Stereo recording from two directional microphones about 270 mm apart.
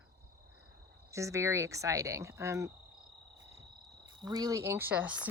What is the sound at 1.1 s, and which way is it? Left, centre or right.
Speech, centre.